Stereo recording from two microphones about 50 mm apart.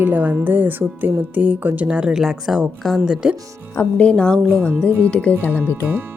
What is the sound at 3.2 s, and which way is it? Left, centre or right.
Speech, centre.